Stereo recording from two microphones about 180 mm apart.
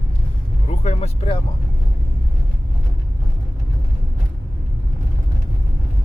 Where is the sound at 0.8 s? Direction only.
35° left (ahead or behind).